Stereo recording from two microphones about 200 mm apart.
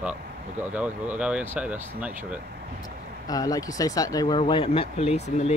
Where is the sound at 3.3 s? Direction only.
15° left (ahead or behind); by 5.5 s 35° left (ahead or behind).